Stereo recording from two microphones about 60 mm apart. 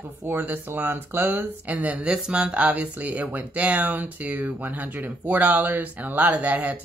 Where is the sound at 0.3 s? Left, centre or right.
Right.